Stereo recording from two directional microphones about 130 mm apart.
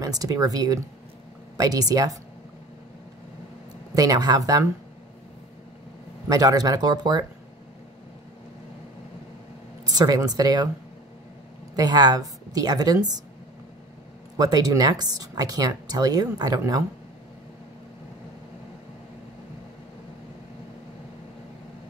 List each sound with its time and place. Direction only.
0.0 s speech: 30° right (ahead or behind)
3.9 s speech: 25° right (ahead or behind)
6.2 s speech: 30° right (ahead or behind)
9.8 s speech: 30° right (ahead or behind)
11.7 s speech: 30° right (ahead or behind)
14.4 s speech: 30° right (ahead or behind)